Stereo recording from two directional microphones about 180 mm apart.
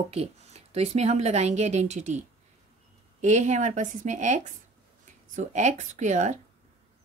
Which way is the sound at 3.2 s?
40° right (ahead or behind).